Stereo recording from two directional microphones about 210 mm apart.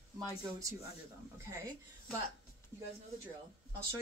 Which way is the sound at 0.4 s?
15° right (ahead or behind).